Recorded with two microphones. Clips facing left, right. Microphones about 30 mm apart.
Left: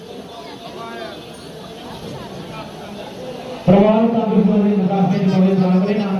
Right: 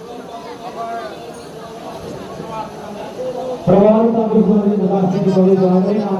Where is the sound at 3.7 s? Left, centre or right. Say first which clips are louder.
Right 2 dB; left.